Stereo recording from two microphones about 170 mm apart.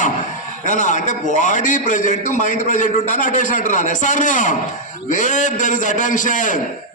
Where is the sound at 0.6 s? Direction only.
45° left (ahead or behind).